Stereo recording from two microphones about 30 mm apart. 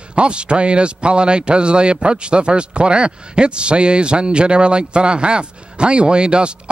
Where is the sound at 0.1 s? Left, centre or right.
Right.